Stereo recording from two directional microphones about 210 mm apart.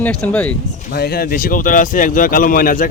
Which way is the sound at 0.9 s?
50° left (ahead or behind).